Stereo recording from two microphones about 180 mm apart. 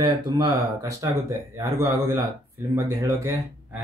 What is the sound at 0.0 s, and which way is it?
Speech, 20° right (ahead or behind).